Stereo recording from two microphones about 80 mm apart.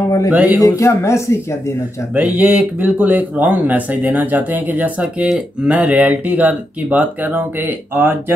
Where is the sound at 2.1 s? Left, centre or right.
Centre.